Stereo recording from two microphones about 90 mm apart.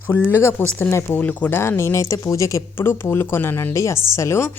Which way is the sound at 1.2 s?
15° left (ahead or behind).